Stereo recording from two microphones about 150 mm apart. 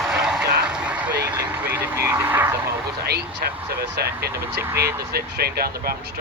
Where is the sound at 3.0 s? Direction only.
90° right.